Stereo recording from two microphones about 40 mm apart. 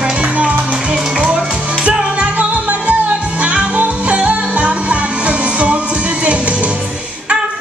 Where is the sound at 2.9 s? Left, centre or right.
Right.